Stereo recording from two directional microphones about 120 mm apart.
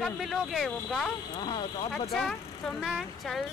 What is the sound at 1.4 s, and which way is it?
Speech, 40° left (ahead or behind).